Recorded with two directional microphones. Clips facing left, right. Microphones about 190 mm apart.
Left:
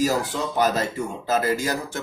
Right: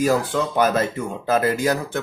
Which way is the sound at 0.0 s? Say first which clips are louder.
Right 3 dB; 55° right (ahead or behind).